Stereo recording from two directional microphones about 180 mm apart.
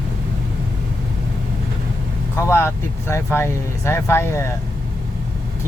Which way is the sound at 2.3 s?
15° left (ahead or behind).